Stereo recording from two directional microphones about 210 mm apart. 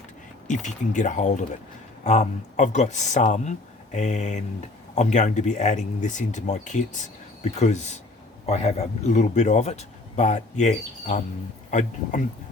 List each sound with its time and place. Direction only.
0.4 s speech: 35° left (ahead or behind)